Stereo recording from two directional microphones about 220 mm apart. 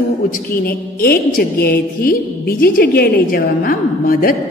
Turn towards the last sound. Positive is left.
turn(degrees=40)  # may be behind; listen again after turning